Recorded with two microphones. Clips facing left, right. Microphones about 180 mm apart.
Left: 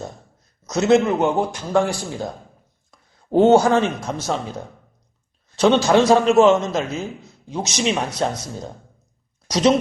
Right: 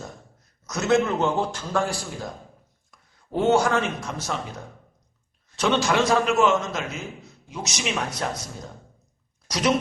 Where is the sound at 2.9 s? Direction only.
30° left (ahead or behind).